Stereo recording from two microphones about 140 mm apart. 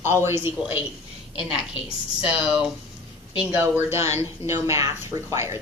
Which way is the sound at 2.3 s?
5° right (ahead or behind).